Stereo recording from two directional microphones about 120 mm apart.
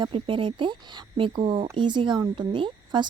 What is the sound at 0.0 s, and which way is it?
Speech, 45° right (ahead or behind).